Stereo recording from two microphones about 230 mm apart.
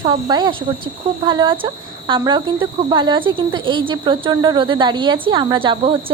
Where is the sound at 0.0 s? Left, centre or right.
Right.